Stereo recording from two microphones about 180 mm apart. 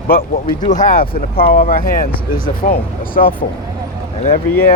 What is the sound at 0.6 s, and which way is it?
Speech, 45° left (ahead or behind).